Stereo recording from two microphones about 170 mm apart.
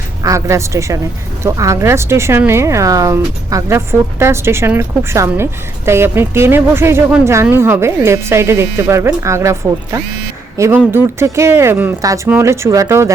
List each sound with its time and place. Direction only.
0.2 s speech: 20° right (ahead or behind)